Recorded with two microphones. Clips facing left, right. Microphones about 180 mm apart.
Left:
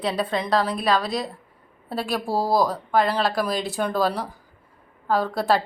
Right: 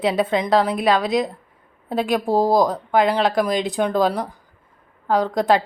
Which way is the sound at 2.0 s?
20° right (ahead or behind).